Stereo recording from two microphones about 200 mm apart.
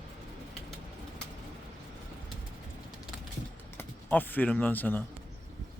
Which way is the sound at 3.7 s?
10° left (ahead or behind).